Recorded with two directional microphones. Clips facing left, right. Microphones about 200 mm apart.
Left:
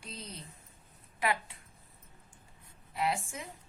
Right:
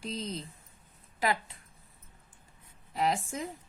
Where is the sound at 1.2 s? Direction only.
35° right (ahead or behind).